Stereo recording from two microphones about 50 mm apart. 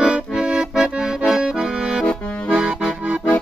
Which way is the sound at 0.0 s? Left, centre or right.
Centre.